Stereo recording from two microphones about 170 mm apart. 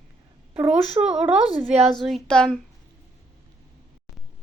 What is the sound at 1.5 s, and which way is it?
Speech, 35° right (ahead or behind).